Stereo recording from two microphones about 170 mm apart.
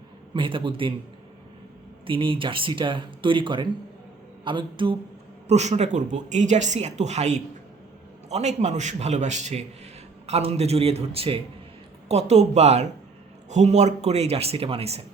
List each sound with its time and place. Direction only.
0.3 s speech: 30° right (ahead or behind)
2.0 s speech: 30° right (ahead or behind)
5.5 s speech: 40° right (ahead or behind)